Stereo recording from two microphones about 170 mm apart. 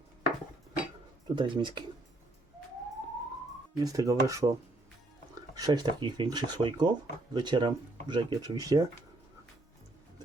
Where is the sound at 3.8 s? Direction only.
20° right (ahead or behind).